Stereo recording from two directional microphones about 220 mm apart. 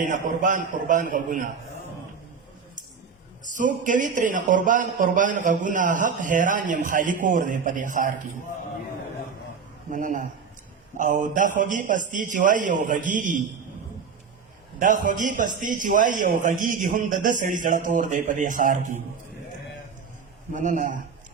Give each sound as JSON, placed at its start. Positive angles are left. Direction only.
{"t": 0.0, "sound": "a man's voice", "side_deg": -35}
{"t": 3.4, "sound": "a man's voice", "side_deg": -35}
{"t": 9.9, "sound": "a man's voice", "side_deg": -35}
{"t": 14.8, "sound": "a man's voice", "side_deg": -35}
{"t": 20.5, "sound": "a man's voice", "side_deg": -35}